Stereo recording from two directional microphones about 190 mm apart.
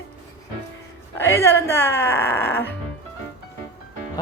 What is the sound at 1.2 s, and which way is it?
Speech, 15° left (ahead or behind).